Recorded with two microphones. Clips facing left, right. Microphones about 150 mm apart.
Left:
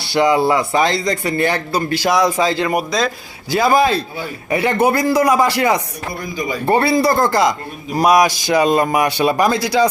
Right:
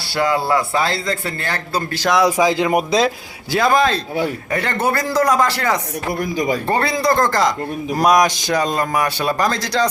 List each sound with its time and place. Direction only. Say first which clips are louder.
0.0 s speech: left 5 dB; 20° left (ahead or behind)
2.1 s speech: right 3 dB; 10° right (ahead or behind); by 3.1 s 25° right (ahead or behind)
3.5 s a man's voice: left 2 dB; 5° left (ahead or behind)